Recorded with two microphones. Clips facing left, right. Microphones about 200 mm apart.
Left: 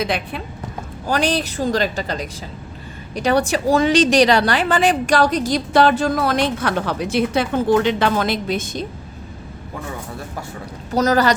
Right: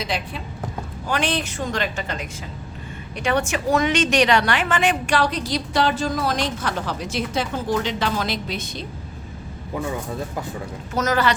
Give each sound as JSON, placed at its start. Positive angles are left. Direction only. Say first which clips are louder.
{"t": 0.0, "sound": "a woman's voice", "louder": "left 5 dB", "side_deg": 60}
{"t": 1.0, "sound": "a woman's voice", "louder": "left 4 dB", "side_deg": 40}
{"t": 10.9, "sound": "a woman's voice", "louder": "left 5 dB", "side_deg": 35}